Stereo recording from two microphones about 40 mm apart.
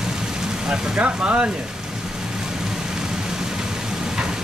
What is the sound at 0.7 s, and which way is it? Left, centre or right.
Speech, right.